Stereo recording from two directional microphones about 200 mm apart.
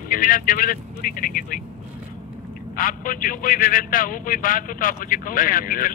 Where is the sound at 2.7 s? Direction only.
45° left (ahead or behind).